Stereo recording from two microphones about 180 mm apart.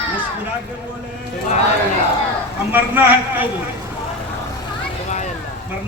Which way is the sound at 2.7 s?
10° right (ahead or behind).